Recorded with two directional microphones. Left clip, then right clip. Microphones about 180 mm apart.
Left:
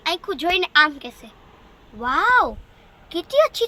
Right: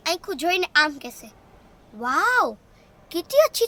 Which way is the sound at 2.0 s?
20° right (ahead or behind).